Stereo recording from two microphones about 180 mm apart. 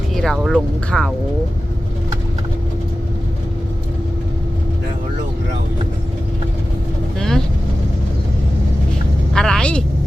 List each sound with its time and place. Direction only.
0.1 s speech: centre (ahead or behind)
7.2 s vehicle: 5° left (ahead or behind)
9.3 s vehicle: 5° left (ahead or behind)